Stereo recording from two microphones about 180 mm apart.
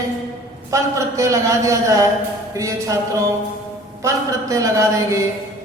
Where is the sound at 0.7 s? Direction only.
15° right (ahead or behind).